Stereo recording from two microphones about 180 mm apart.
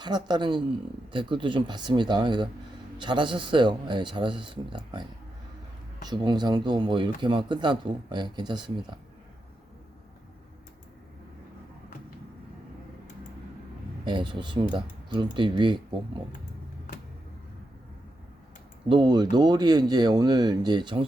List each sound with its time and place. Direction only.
0.0 s speech: 25° right (ahead or behind)
6.1 s speech: 25° right (ahead or behind)
14.0 s speech: 25° right (ahead or behind)
18.9 s speech: 25° right (ahead or behind)